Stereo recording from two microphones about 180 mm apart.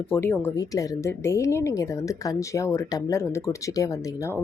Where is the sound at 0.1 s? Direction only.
10° left (ahead or behind).